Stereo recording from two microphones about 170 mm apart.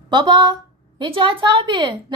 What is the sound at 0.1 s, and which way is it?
A woman's voice, 25° right (ahead or behind).